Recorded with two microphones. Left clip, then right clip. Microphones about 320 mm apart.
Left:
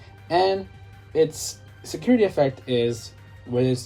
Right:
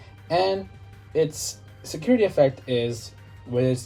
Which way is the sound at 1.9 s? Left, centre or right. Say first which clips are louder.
Left 1 dB; left.